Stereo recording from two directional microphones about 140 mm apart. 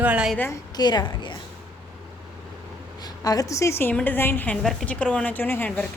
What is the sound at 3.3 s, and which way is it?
Speech, 25° left (ahead or behind).